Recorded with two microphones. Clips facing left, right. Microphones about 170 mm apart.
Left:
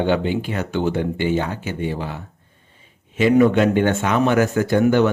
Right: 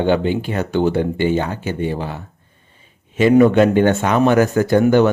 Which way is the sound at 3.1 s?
40° right (ahead or behind).